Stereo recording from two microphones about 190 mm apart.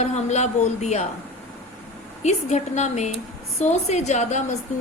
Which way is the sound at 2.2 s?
35° left (ahead or behind).